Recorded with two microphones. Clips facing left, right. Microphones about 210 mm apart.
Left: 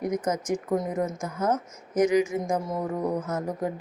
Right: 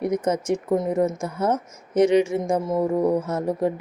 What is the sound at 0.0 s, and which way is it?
Speech, 30° right (ahead or behind).